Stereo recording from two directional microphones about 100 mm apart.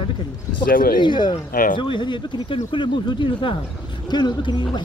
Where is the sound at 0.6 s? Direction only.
50° left (ahead or behind).